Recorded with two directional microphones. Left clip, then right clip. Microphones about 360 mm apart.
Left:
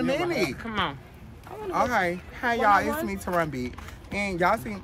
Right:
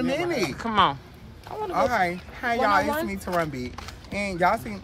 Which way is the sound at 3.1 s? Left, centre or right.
Centre.